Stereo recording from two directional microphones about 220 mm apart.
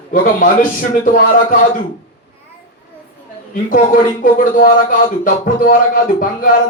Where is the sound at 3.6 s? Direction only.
35° left (ahead or behind).